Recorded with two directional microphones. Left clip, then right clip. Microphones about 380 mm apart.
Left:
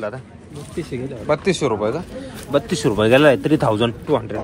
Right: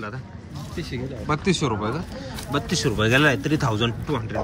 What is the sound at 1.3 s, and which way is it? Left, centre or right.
Speech, centre.